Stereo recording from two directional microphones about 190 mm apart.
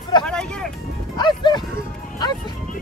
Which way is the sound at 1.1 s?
25° left (ahead or behind).